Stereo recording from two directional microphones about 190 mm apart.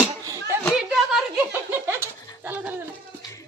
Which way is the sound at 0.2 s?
15° right (ahead or behind).